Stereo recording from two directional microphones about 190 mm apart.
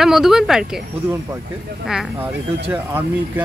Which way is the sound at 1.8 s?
5° right (ahead or behind).